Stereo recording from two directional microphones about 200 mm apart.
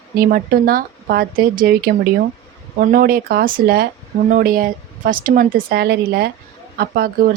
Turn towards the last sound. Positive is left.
turn(degrees=-45)  # may be behind; listen again after turning